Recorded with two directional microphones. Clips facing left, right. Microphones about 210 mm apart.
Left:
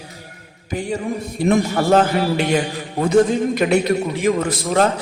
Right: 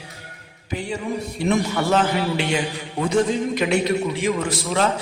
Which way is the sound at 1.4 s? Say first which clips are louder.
Left 5 dB; 50° left (ahead or behind).